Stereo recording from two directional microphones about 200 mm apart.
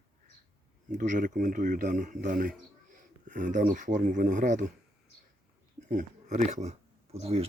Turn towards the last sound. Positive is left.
turn(degrees=-30)  # may be behind; listen again after turning